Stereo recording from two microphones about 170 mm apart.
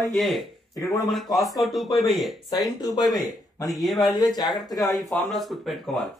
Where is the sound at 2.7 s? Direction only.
25° left (ahead or behind).